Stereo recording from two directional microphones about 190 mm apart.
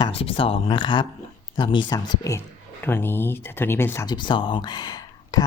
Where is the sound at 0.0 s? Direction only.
30° left (ahead or behind).